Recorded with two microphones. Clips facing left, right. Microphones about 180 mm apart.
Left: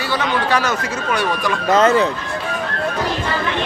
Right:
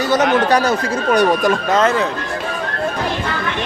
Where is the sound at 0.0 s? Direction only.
45° right (ahead or behind).